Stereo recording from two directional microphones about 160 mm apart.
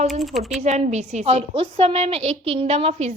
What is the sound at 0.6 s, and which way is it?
A woman's voice, 45° right (ahead or behind).